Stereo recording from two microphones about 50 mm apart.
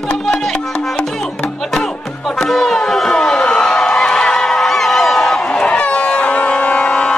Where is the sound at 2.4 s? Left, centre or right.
Centre.